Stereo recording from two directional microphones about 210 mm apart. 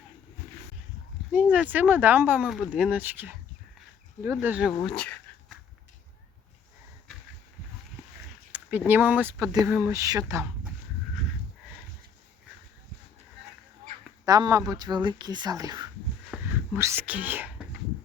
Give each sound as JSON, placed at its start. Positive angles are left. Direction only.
{"t": 1.3, "sound": "speech", "side_deg": -5}
{"t": 4.8, "sound": "a sound", "side_deg": 5}
{"t": 8.5, "sound": "speech", "side_deg": -5}
{"t": 14.3, "sound": "speech", "side_deg": -15}
{"t": 16.3, "sound": "wheeze", "side_deg": 0}
{"t": 16.7, "sound": "speech", "side_deg": -10}